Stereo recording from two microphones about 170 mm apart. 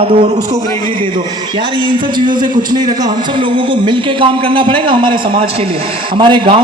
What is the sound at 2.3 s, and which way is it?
A man's voice, 25° right (ahead or behind).